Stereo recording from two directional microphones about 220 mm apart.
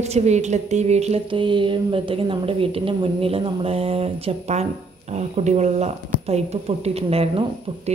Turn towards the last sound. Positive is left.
turn(degrees=-25)  # may be behind; listen again after turning